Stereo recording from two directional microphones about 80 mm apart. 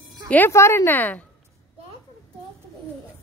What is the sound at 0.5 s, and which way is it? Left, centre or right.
Speech, left.